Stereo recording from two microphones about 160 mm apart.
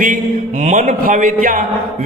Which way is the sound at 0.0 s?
50° right (ahead or behind).